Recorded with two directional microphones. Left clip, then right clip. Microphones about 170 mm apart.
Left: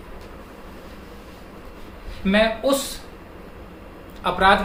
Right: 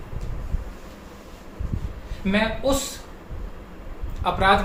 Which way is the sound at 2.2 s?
15° left (ahead or behind).